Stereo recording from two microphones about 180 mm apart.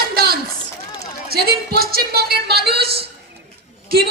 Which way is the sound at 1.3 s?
60° right (ahead or behind).